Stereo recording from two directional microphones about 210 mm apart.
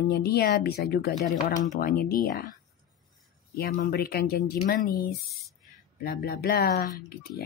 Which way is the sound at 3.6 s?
45° left (ahead or behind).